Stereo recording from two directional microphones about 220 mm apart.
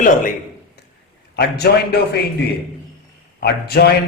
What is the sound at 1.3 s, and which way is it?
Speech, 45° left (ahead or behind).